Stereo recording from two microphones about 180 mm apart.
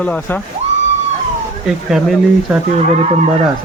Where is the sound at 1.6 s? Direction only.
5° right (ahead or behind).